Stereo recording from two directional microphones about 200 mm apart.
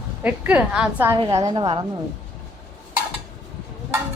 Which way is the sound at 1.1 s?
25° right (ahead or behind).